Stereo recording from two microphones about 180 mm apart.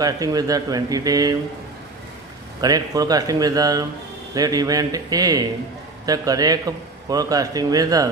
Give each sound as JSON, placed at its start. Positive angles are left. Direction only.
{"t": 0.0, "sound": "a man's voice", "side_deg": -20}
{"t": 2.6, "sound": "a man's voice", "side_deg": -20}